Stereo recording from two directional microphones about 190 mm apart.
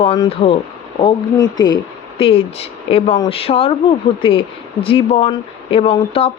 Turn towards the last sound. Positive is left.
turn(degrees=30)  # may be behind; listen again after turning